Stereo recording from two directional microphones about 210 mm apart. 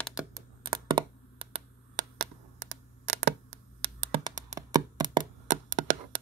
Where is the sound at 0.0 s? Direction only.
5° right (ahead or behind).